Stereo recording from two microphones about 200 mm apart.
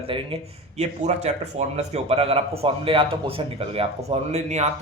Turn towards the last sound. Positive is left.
turn(degrees=-35)  # may be behind; listen again after turning